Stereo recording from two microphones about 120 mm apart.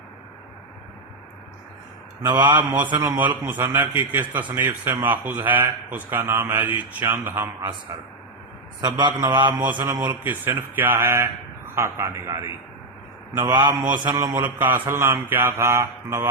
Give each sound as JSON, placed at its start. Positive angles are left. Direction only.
{"t": 2.2, "sound": "a man's voice", "side_deg": -40}
{"t": 3.2, "sound": "a man's voice", "side_deg": -15}
{"t": 8.8, "sound": "a man's voice", "side_deg": -40}
{"t": 10.8, "sound": "mantra", "side_deg": -20}
{"t": 13.3, "sound": "a man's voice", "side_deg": -40}
{"t": 14.4, "sound": "mantra", "side_deg": -15}